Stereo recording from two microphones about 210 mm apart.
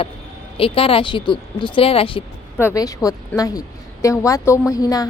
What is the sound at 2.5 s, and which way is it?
Speech, 15° left (ahead or behind).